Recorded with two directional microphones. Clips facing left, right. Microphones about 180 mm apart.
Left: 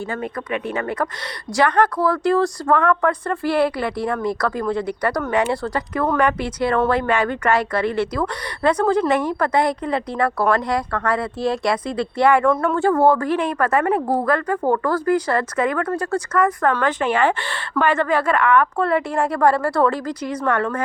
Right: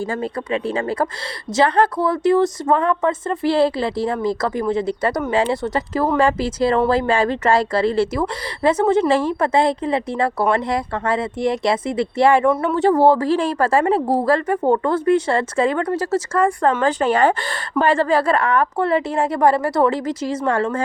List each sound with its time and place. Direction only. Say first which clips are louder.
0.1 s a woman's voice: right 3 dB; 30° right (ahead or behind)
18.8 s a woman's voice: right 1 dB; 20° right (ahead or behind)